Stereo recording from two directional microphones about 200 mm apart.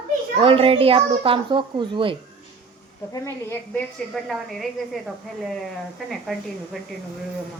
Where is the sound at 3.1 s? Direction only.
15° left (ahead or behind).